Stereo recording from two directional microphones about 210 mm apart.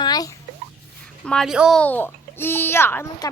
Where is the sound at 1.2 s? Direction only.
Centre (ahead or behind).